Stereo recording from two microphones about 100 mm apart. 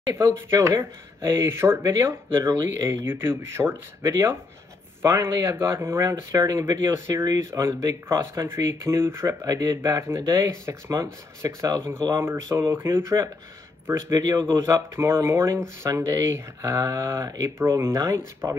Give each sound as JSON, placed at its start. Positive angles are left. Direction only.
{"t": 0.5, "sound": "speech", "side_deg": -30}
{"t": 1.8, "sound": "speech", "side_deg": -40}
{"t": 2.0, "sound": "speech", "side_deg": -25}
{"t": 9.5, "sound": "speech", "side_deg": -40}
{"t": 14.1, "sound": "speech", "side_deg": -35}
{"t": 14.6, "sound": "speech", "side_deg": -25}